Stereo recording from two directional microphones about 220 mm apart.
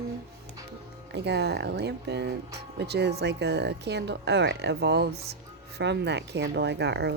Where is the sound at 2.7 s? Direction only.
50° right (ahead or behind).